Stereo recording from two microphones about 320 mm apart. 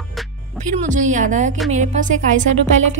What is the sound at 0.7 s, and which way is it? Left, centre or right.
A woman's voice, right.